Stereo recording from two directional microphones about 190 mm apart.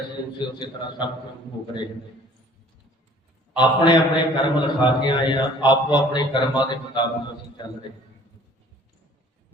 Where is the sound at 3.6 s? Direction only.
25° left (ahead or behind).